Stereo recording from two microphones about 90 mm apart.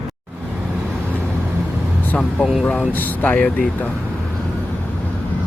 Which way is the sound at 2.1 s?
15° left (ahead or behind).